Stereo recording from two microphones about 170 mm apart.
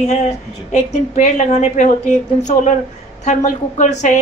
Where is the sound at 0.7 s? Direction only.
45° left (ahead or behind).